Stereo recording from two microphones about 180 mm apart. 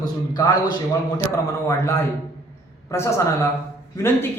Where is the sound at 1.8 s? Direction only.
15° left (ahead or behind).